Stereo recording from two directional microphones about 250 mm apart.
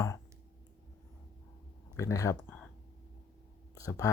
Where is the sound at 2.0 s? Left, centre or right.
Centre.